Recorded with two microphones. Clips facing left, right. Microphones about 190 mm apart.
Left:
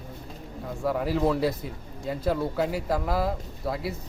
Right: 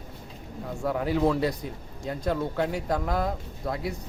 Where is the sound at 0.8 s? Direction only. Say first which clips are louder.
Even; centre (ahead or behind).